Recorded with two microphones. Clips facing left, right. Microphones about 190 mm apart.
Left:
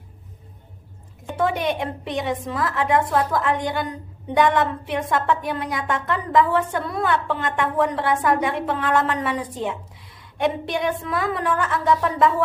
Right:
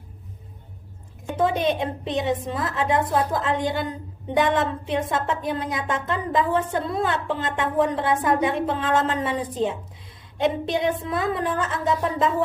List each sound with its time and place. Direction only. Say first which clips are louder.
1.4 s a woman's voice: right 1 dB; 25° right (ahead or behind)